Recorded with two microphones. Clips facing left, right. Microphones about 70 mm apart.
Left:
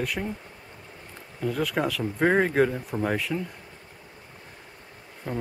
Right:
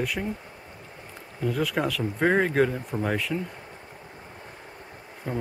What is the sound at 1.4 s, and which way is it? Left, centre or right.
Speech, centre.